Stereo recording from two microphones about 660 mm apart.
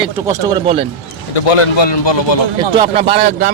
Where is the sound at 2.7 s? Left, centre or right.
Centre.